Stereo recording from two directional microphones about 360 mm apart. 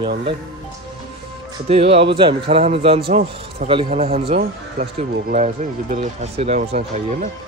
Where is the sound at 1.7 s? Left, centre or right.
Centre.